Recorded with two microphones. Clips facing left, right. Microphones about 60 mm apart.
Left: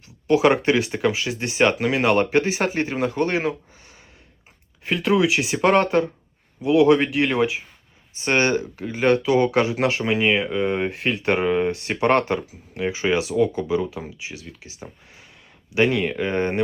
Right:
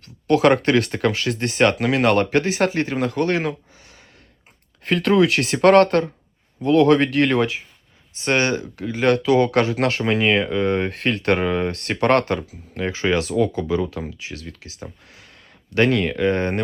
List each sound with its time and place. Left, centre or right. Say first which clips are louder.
0.0 s speech: right 1 dB; centre
8.1 s speech: even; left
15.7 s speech: right 2 dB; centre